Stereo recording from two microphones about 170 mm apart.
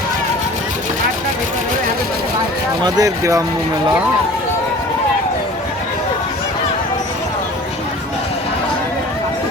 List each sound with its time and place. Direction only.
2.8 s speech: 20° right (ahead or behind)